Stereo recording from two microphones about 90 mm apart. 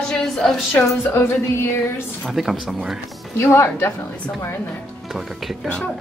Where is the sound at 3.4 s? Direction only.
30° left (ahead or behind).